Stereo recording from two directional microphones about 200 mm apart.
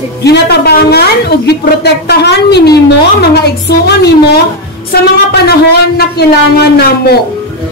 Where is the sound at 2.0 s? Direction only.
55° left (ahead or behind).